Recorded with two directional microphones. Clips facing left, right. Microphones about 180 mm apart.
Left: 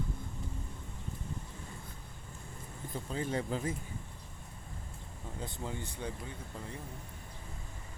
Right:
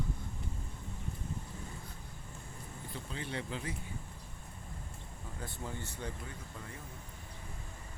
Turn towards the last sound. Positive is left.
turn(degrees=15)  # may be behind; listen again after turning